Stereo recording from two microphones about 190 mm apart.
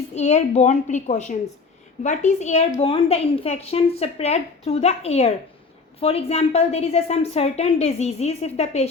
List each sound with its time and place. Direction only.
0.1 s a woman's voice: 35° left (ahead or behind)